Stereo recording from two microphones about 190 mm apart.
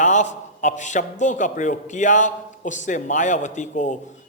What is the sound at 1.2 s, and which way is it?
A man's voice, 40° left (ahead or behind).